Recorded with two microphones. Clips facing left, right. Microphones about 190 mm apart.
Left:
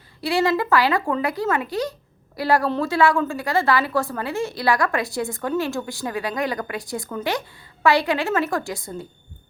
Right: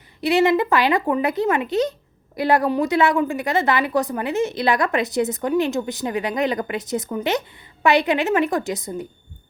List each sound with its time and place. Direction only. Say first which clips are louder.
0.2 s a woman's voice: right 4 dB; 20° right (ahead or behind)